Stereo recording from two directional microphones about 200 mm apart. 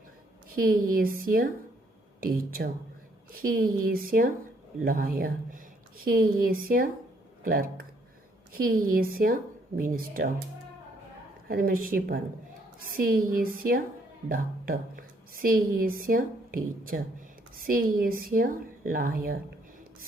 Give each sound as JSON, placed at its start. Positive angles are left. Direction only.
{"t": 0.5, "sound": "a woman's voice", "side_deg": -45}
{"t": 11.4, "sound": "a woman's voice", "side_deg": -45}